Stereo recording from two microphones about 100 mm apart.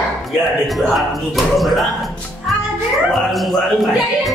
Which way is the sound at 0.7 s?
Centre (ahead or behind).